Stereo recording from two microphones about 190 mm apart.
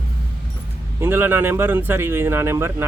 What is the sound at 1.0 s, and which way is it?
Speech, 10° right (ahead or behind).